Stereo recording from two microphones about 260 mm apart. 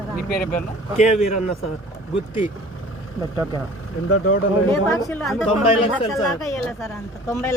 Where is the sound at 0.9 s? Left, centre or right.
Left.